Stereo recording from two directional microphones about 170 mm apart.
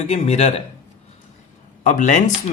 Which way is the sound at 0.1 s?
40° left (ahead or behind).